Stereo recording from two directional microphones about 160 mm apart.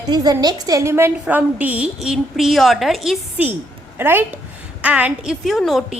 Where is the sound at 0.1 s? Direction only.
25° right (ahead or behind).